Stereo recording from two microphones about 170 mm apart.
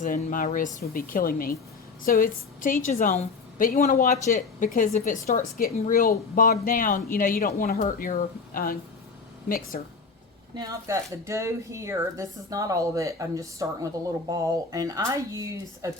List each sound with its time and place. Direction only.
0.0 s a woman's voice: 50° left (ahead or behind)
10.5 s speech: 20° right (ahead or behind)